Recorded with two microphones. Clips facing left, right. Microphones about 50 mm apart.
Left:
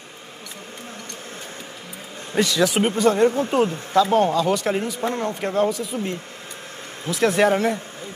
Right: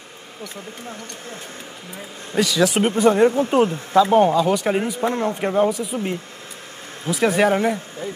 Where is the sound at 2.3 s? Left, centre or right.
Centre.